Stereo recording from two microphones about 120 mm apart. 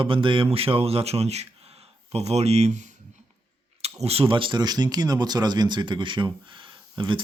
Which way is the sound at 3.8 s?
55° right (ahead or behind).